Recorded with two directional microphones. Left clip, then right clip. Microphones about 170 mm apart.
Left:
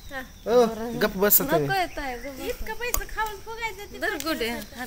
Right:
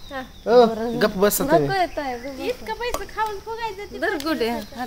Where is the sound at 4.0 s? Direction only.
25° right (ahead or behind).